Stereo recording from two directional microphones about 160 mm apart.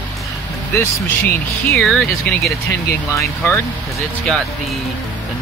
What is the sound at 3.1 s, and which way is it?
Speech, 15° left (ahead or behind).